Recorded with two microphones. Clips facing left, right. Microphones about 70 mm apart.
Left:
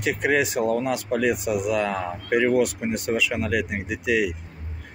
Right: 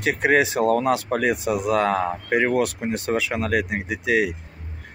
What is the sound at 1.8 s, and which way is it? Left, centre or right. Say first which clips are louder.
Speech: right 4 dB; right.